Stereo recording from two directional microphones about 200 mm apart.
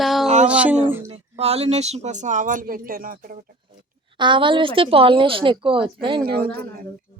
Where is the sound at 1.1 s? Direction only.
30° right (ahead or behind); by 3.3 s 45° right (ahead or behind).